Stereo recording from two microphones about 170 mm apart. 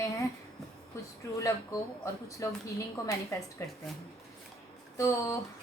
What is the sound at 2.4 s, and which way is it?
Speech, 20° left (ahead or behind).